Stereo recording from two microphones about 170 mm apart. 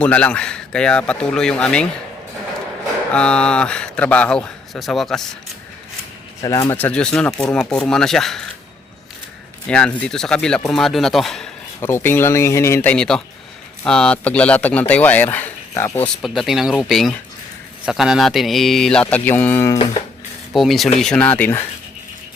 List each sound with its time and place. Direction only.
0.0 s a man's voice: 5° left (ahead or behind)
3.1 s a man's voice: 5° left (ahead or behind)
6.4 s speech: 20° left (ahead or behind)
6.7 s a man's voice: 10° left (ahead or behind)
9.6 s a man's voice: 5° left (ahead or behind)
11.8 s speech: 15° left (ahead or behind)
16.2 s a man's voice: centre (ahead or behind)
20.5 s a man's voice: centre (ahead or behind)